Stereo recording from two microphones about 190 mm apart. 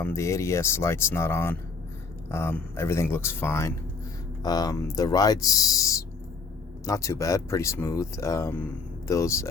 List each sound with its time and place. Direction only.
0.0 s speech: 15° left (ahead or behind)